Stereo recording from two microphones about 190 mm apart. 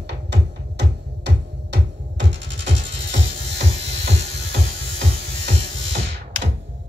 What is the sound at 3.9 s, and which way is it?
Music, 35° right (ahead or behind).